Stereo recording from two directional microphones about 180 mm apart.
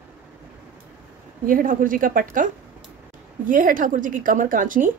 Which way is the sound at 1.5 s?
50° right (ahead or behind).